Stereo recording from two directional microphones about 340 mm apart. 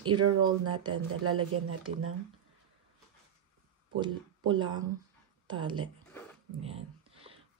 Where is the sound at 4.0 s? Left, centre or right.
Centre.